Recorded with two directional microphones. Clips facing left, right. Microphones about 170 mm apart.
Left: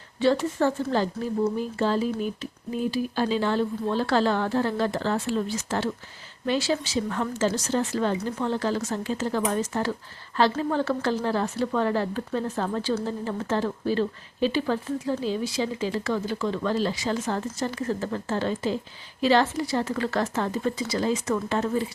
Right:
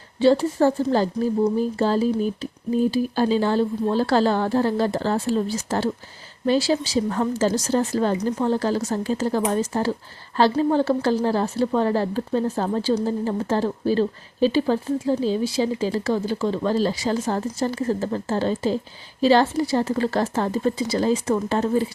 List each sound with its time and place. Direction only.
0.2 s speech: 30° right (ahead or behind)